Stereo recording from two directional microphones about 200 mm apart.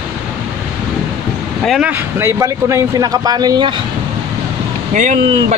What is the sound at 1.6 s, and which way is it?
A man's voice, 5° right (ahead or behind).